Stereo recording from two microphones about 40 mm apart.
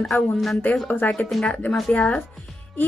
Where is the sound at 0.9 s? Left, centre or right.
Left.